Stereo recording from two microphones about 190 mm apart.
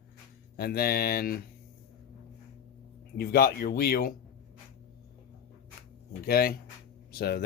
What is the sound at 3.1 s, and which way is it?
Speech, 55° left (ahead or behind).